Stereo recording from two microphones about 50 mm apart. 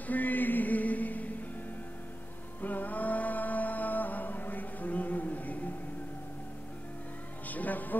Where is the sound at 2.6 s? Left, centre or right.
Left.